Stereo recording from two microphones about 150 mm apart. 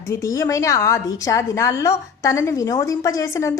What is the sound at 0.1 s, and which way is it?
A woman's voice, 20° left (ahead or behind).